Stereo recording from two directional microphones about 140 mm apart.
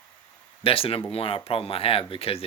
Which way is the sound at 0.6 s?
40° left (ahead or behind).